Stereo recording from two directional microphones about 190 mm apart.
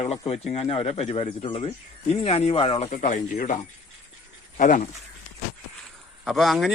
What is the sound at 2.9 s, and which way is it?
Speech, 40° left (ahead or behind).